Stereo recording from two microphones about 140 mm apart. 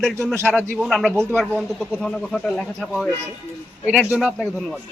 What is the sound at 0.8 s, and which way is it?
Speech, 5° left (ahead or behind).